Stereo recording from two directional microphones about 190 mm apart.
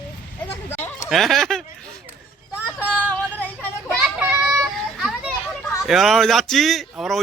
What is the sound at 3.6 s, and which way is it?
Children playing, 10° left (ahead or behind).